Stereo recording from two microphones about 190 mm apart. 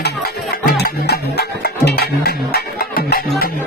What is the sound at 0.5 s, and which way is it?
Music, 50° left (ahead or behind).